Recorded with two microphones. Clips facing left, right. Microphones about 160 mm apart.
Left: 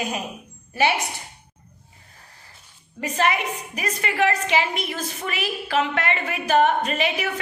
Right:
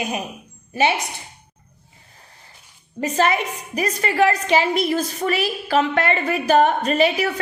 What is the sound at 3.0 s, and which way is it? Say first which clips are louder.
A woman's voice: right 3 dB; 35° right (ahead or behind).